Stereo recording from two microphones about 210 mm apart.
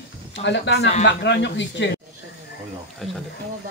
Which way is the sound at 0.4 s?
55° left (ahead or behind).